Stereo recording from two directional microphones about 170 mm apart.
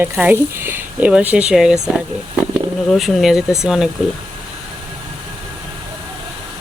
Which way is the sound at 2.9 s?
Centre (ahead or behind).